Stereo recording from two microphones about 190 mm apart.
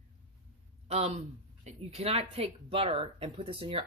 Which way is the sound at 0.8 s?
35° right (ahead or behind).